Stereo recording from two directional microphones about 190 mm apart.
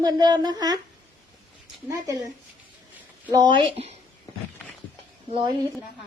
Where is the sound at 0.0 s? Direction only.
20° right (ahead or behind).